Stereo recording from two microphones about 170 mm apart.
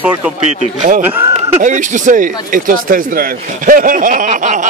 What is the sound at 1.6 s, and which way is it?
Speech, 45° right (ahead or behind).